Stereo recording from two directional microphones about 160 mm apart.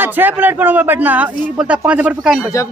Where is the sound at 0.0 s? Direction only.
10° right (ahead or behind).